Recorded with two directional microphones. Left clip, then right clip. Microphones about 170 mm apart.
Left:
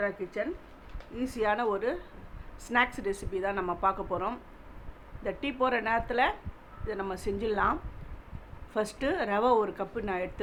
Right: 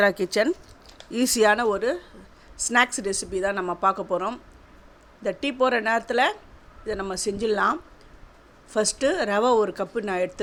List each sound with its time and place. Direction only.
0.0 s speech: 90° right
1.1 s speech: 60° right (ahead or behind); by 10.4 s 35° right (ahead or behind)